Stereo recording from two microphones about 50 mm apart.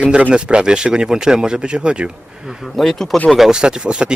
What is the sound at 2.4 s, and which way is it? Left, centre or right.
Speech, centre.